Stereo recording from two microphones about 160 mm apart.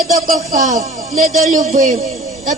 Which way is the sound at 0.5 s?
20° right (ahead or behind).